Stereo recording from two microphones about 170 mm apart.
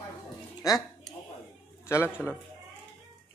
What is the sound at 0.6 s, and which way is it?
Speech, 20° left (ahead or behind).